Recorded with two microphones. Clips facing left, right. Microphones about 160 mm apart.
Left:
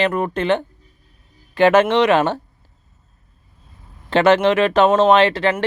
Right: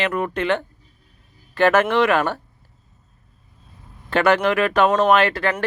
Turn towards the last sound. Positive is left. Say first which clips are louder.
# left 4 dB
turn(degrees=25)  # may be behind; listen again after turning